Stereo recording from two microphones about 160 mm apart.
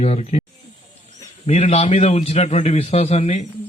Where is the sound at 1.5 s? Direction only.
45° left (ahead or behind).